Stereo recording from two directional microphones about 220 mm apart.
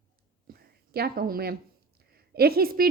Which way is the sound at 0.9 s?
45° right (ahead or behind).